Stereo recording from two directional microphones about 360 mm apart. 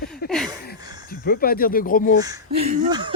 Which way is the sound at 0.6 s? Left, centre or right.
Left.